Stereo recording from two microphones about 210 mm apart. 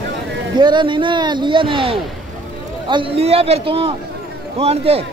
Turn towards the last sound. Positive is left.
turn(degrees=-30)  # may be behind; listen again after turning